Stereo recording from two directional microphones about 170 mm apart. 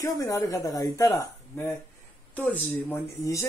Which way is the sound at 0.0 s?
20° left (ahead or behind).